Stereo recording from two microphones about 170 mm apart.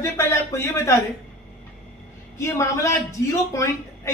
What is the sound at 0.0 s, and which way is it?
Speech, 15° left (ahead or behind).